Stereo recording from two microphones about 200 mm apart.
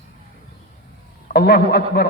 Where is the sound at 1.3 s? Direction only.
50° left (ahead or behind).